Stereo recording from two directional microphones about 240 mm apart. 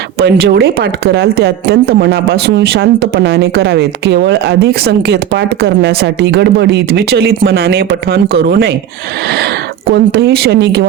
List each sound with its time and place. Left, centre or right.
0.2 s speech: right
9.9 s speech: right